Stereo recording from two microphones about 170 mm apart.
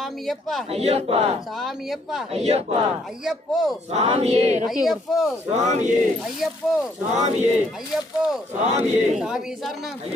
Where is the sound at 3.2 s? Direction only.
Centre (ahead or behind).